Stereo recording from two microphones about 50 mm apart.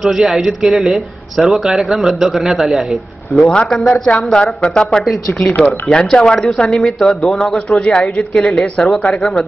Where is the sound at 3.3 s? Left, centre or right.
Centre.